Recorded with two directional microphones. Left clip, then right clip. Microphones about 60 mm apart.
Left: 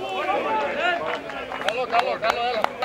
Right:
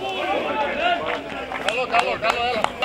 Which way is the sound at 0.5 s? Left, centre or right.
Left.